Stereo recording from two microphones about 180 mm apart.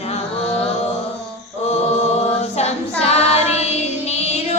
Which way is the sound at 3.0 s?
35° left (ahead or behind).